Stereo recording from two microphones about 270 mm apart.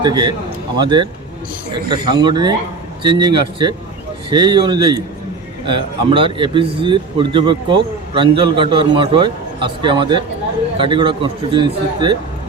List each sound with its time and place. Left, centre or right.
0.0 s speech: centre